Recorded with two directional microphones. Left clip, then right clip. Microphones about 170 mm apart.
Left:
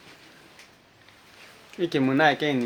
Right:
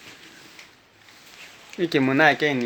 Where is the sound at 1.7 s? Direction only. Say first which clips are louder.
Right 3 dB; 55° right (ahead or behind); by 2.6 s 30° right (ahead or behind).